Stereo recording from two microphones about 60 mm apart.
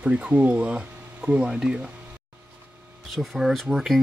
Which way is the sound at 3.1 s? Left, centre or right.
Centre.